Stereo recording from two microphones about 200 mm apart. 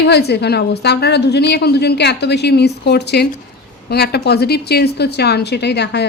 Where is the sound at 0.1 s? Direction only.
55° left (ahead or behind).